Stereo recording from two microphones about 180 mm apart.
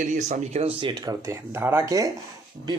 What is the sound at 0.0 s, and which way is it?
Speech, 40° right (ahead or behind).